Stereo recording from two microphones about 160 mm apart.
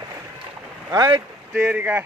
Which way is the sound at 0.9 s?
25° right (ahead or behind).